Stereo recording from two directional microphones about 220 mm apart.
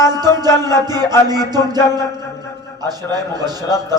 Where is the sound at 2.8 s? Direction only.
20° right (ahead or behind).